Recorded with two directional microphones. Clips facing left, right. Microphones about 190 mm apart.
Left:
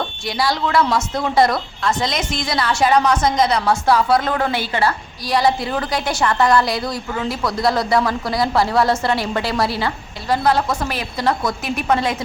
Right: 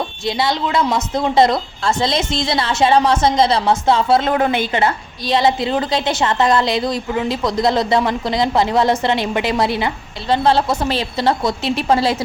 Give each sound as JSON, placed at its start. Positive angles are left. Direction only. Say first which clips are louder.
{"t": 0.3, "sound": "a woman's voice", "louder": "right 2 dB", "side_deg": -25}